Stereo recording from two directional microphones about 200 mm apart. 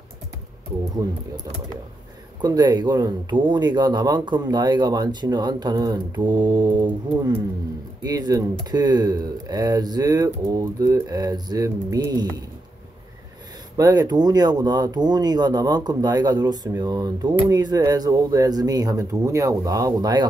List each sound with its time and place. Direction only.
0.9 s speech: 20° right (ahead or behind)
13.7 s speech: 20° right (ahead or behind)